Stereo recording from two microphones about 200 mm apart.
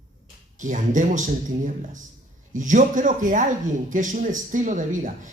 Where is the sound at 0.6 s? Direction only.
40° right (ahead or behind).